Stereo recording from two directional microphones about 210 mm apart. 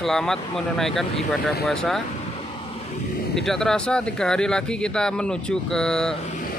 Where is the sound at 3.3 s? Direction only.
Centre (ahead or behind).